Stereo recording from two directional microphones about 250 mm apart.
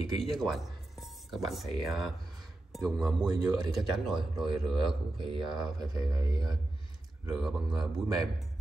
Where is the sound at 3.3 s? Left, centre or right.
Centre.